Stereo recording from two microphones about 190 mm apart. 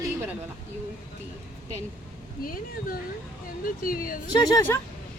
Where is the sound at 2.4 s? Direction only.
50° left (ahead or behind).